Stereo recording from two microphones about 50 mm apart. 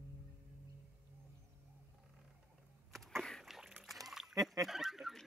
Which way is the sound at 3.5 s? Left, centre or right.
Centre.